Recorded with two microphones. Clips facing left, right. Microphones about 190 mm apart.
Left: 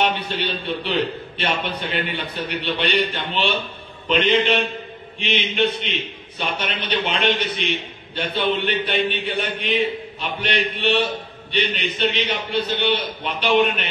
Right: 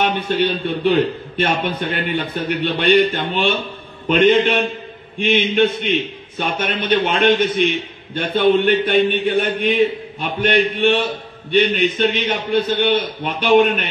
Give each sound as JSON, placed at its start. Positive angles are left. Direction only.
{"t": 0.0, "sound": "a man's voice", "side_deg": -50}